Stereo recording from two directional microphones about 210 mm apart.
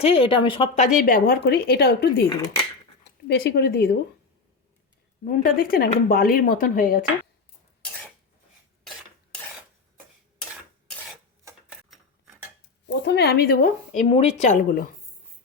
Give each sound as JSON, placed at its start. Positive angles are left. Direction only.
{"t": 0.0, "sound": "speech", "side_deg": 25}
{"t": 3.2, "sound": "speech", "side_deg": 50}
{"t": 5.2, "sound": "speech", "side_deg": 40}
{"t": 9.0, "sound": "stir", "side_deg": 0}
{"t": 11.5, "sound": "a sound", "side_deg": -15}
{"t": 12.9, "sound": "speech", "side_deg": 50}